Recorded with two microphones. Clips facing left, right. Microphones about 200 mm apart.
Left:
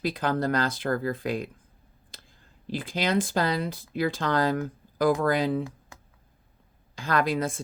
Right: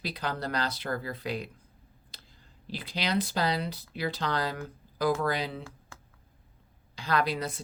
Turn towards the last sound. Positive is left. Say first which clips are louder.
# left 3 dB
turn(degrees=50)  # may be behind; listen again after turning